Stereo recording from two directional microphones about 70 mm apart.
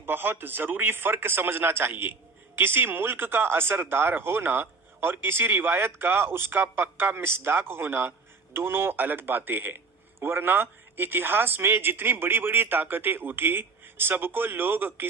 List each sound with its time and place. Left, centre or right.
0.0 s a man's voice: right